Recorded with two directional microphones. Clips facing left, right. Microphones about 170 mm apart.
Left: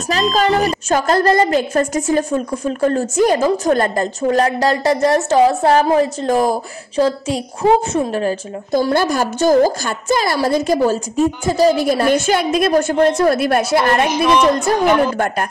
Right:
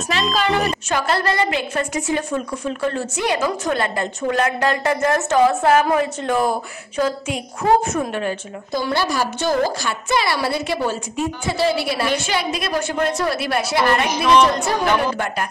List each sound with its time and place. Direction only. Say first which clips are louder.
0.3 s a woman's voice: left 4 dB; 40° left (ahead or behind)